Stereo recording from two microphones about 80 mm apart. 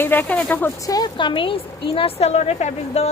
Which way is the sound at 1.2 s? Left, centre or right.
Left.